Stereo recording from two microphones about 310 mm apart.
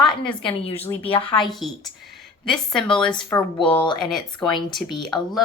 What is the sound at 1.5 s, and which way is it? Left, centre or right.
Speech, centre.